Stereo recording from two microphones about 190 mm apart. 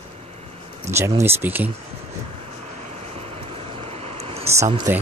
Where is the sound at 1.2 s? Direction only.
10° right (ahead or behind).